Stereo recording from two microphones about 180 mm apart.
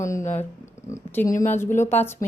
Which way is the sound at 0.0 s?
15° left (ahead or behind).